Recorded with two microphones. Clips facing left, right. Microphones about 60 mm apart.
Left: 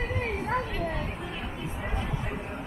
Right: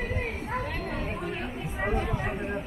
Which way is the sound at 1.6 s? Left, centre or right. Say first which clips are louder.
Right 7 dB; right.